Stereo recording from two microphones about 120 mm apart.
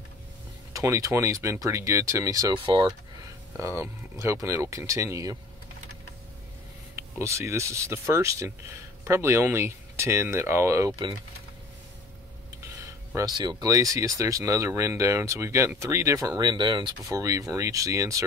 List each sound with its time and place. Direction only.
0.7 s speech: 25° right (ahead or behind)
3.5 s speech: 20° right (ahead or behind)
7.0 s speech: 20° right (ahead or behind)
13.1 s speech: 35° right (ahead or behind)
17.0 s speech: 30° right (ahead or behind)